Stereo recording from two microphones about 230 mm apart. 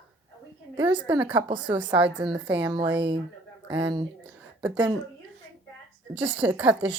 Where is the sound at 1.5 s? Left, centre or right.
Centre.